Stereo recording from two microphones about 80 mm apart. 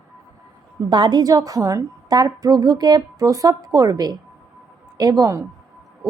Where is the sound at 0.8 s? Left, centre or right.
Right.